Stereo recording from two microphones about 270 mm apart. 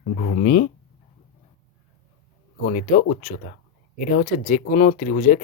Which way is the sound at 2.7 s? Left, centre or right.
Left.